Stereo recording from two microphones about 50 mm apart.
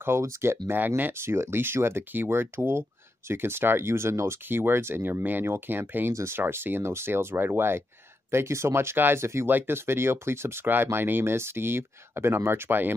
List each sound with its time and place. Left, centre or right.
0.0 s speech: right
0.7 s speech: right
1.1 s speech: right
4.5 s speech: right
6.8 s speech: right
8.3 s speech: right
9.2 s speech: right
9.5 s speech: right